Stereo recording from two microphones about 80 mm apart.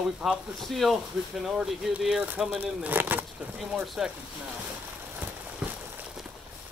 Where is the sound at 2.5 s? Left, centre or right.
Right.